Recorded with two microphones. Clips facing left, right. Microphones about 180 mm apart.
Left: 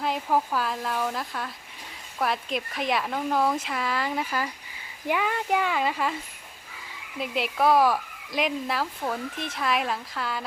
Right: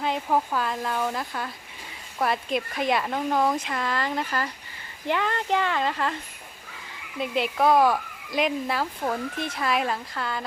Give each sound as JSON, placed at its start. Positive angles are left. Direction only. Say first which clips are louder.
{"t": 0.0, "sound": "speech", "louder": "right 1 dB", "side_deg": 0}